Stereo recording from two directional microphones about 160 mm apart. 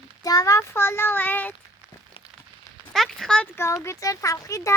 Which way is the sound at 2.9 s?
Centre (ahead or behind).